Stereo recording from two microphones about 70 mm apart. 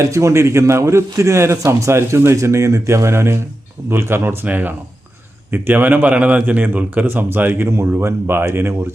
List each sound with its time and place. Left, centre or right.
0.1 s a man's voice: right
7.7 s speech: right